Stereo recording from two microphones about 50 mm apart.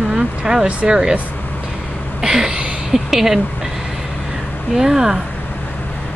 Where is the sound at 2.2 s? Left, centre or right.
Centre.